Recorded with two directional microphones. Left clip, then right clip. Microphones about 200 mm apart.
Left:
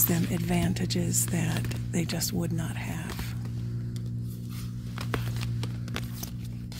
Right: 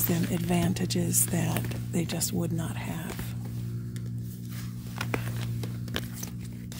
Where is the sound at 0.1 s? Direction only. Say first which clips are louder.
Even; 5° right (ahead or behind).